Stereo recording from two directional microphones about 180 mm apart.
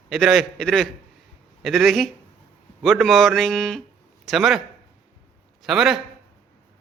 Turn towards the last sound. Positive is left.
turn(degrees=0)  # may be behind; listen again after turning